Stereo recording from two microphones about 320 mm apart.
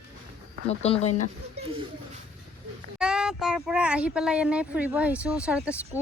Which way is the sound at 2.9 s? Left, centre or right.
Centre.